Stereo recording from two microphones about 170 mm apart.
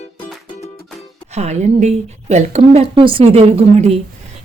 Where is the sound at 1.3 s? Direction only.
40° right (ahead or behind).